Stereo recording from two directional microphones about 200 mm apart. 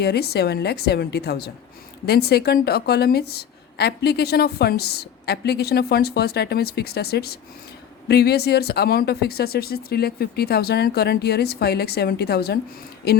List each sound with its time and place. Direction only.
0.0 s a woman's voice: 55° left (ahead or behind)